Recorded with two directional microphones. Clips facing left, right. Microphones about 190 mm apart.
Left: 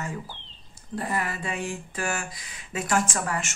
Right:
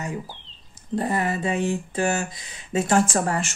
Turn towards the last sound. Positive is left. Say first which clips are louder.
# right 6 dB
turn(degrees=-30)  # may be behind; listen again after turning